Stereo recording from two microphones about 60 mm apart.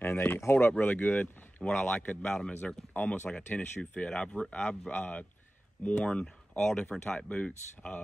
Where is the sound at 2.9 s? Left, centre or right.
Left.